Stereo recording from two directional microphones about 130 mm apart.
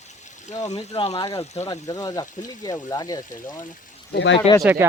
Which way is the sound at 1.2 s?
25° left (ahead or behind).